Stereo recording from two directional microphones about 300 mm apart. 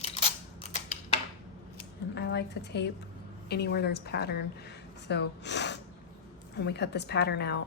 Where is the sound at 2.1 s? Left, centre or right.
Left.